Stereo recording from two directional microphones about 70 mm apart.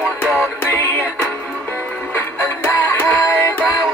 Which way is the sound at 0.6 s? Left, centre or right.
Left.